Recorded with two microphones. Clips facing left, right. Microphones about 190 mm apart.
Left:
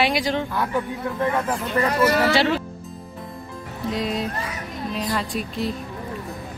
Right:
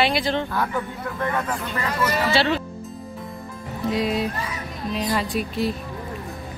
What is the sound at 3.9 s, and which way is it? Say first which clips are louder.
Speech: right 2 dB; 5° right (ahead or behind).